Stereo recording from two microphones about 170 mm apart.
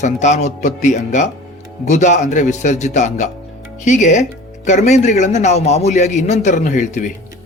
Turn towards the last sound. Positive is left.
turn(degrees=45)  # may be behind; listen again after turning